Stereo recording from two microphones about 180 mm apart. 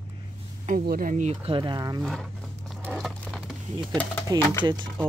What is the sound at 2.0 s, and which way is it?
Speech, centre (ahead or behind).